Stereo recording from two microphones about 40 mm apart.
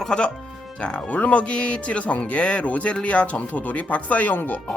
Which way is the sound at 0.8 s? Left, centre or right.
Left.